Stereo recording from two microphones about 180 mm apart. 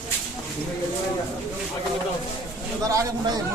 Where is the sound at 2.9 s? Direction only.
20° right (ahead or behind).